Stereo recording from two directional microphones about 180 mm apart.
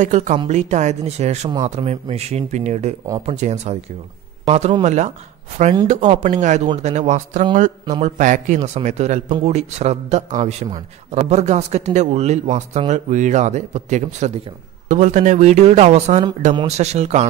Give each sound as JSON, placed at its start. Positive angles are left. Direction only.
{"t": 0.0, "sound": "a man's voice", "side_deg": -45}